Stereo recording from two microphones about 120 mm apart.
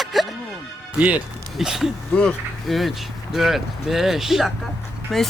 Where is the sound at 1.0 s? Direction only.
10° right (ahead or behind).